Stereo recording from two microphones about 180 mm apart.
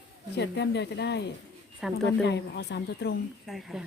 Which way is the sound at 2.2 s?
70° left (ahead or behind).